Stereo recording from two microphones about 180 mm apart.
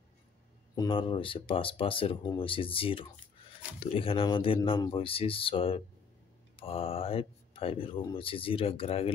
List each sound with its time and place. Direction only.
0.7 s speech: 30° left (ahead or behind)